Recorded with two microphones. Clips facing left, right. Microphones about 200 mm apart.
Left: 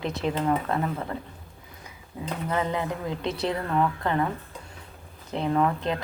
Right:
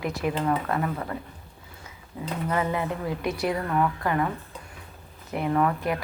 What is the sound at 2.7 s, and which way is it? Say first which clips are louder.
A woman's voice: right 1 dB; 20° left (ahead or behind).